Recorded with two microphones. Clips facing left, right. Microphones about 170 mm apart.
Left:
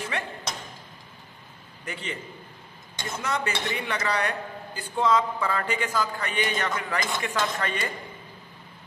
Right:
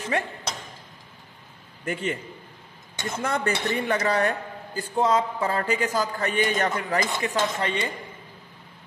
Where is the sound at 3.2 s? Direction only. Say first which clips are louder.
Right 3 dB; 55° right (ahead or behind).